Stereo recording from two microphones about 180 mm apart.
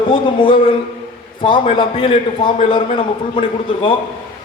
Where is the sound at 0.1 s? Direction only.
30° left (ahead or behind).